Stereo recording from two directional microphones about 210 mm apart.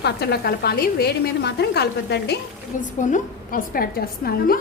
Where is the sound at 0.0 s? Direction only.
50° left (ahead or behind).